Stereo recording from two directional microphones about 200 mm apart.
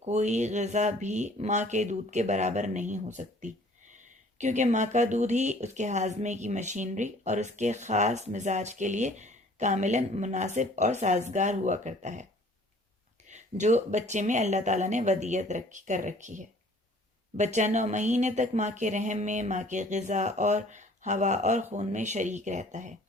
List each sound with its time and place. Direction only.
0.0 s speech: 35° right (ahead or behind)
13.2 s speech: 35° right (ahead or behind)